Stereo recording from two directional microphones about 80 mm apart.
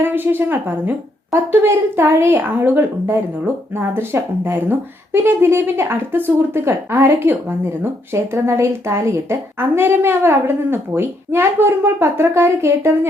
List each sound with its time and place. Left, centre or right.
0.0 s a woman's voice: right